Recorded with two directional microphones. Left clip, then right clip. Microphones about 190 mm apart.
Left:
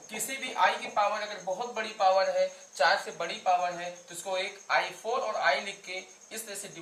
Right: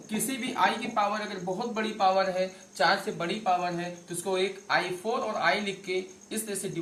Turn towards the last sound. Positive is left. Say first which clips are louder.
# right 5 dB
turn(degrees=5)  # may be behind; listen again after turning